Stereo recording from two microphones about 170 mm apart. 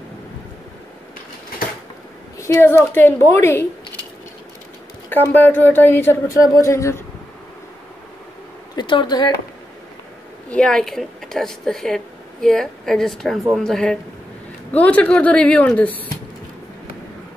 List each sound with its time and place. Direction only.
2.3 s a woman's voice: 15° left (ahead or behind)
5.1 s a woman's voice: 10° left (ahead or behind)
8.7 s speech: 25° left (ahead or behind)
10.5 s a woman's voice: 5° left (ahead or behind)